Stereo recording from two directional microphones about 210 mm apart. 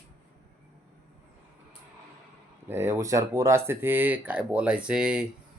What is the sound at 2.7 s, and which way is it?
Speech, 10° right (ahead or behind).